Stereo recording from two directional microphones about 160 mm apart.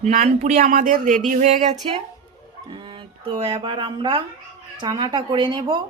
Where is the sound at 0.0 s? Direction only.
45° right (ahead or behind).